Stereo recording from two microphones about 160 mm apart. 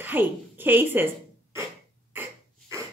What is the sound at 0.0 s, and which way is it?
A woman's voice, 10° right (ahead or behind).